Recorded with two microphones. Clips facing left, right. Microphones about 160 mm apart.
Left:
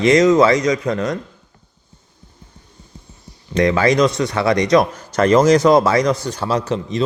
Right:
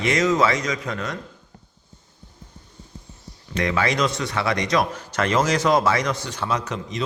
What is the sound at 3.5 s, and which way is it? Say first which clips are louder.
A man's voice: left 8 dB; 35° left (ahead or behind).